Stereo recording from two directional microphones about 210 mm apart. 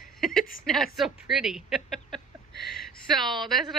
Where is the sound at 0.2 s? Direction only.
Centre (ahead or behind).